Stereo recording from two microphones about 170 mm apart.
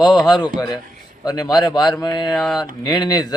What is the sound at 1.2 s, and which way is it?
Speech, 20° left (ahead or behind).